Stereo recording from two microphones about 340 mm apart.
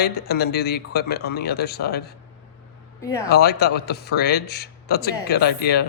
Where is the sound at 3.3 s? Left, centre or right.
Left.